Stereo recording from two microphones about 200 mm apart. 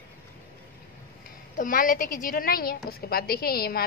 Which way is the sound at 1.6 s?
45° left (ahead or behind).